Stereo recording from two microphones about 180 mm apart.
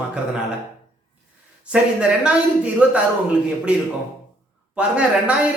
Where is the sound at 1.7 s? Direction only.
5° right (ahead or behind).